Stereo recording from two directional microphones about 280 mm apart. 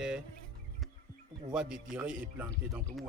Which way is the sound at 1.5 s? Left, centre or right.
Centre.